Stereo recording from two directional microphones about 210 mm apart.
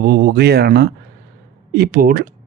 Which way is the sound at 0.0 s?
45° right (ahead or behind).